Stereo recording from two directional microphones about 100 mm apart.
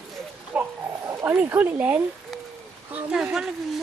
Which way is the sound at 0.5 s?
15° right (ahead or behind).